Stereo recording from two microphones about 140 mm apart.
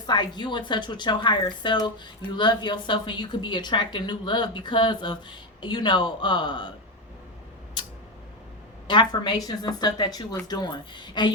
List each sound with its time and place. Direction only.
0.1 s speech: 30° left (ahead or behind)
8.9 s speech: 35° left (ahead or behind)